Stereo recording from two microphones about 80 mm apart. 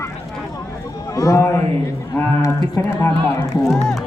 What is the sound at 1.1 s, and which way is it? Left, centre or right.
Speech, left.